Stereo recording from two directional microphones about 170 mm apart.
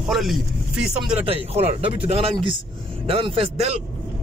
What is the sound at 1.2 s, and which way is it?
A man's voice, 35° right (ahead or behind).